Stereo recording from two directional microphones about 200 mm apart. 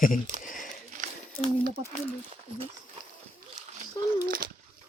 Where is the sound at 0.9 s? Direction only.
40° right (ahead or behind).